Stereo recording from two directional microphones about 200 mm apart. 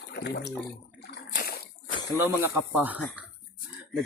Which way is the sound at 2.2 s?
10° right (ahead or behind).